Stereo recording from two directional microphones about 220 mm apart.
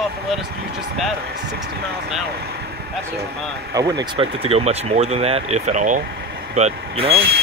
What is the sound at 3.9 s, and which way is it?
Speech, 20° right (ahead or behind).